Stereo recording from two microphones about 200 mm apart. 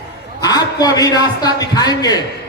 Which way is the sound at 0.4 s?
20° left (ahead or behind).